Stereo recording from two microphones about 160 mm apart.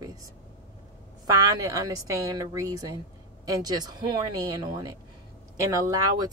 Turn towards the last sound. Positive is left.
turn(degrees=-25)  # may be behind; listen again after turning